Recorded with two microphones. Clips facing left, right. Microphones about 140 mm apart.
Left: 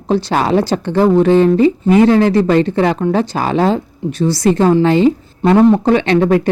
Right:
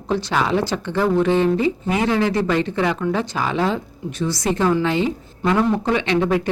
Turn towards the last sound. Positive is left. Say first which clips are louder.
# left 7 dB
turn(degrees=45)  # may be behind; listen again after turning